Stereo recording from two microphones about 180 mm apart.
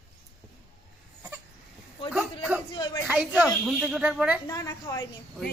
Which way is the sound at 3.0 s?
10° right (ahead or behind).